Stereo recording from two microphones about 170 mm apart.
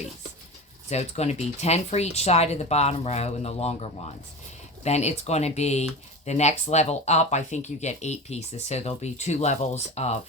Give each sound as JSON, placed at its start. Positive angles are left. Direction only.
{"t": 0.9, "sound": "speech", "side_deg": 40}